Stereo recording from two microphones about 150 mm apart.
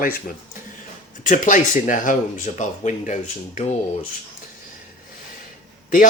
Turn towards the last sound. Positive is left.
turn(degrees=65)  # may be behind; listen again after turning